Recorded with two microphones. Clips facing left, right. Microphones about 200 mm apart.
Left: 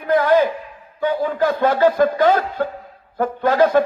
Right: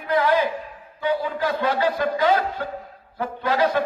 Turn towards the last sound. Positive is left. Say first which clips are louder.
# left 6 dB
turn(degrees=50)  # may be behind; listen again after turning